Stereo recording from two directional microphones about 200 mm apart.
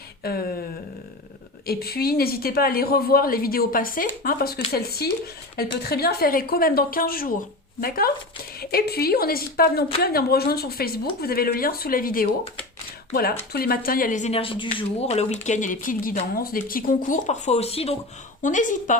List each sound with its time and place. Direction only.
0.2 s a woman's voice: 50° left (ahead or behind)
1.6 s a woman's voice: 50° left (ahead or behind)
13.5 s speech: 50° left (ahead or behind)